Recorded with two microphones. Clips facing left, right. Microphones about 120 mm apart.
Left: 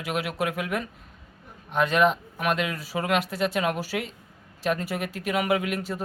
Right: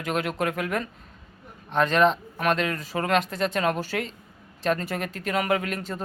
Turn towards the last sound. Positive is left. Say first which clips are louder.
# left 1 dB
turn(degrees=10)  # may be behind; listen again after turning